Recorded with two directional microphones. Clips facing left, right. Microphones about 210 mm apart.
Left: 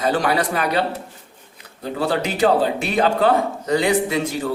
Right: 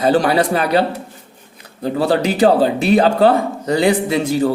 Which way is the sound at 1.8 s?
35° right (ahead or behind).